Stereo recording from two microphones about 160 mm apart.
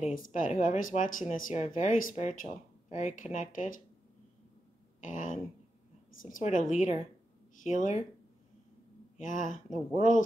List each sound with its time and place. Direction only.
0.1 s speech: 55° left (ahead or behind)
5.0 s speech: 55° left (ahead or behind)
9.2 s speech: 55° left (ahead or behind)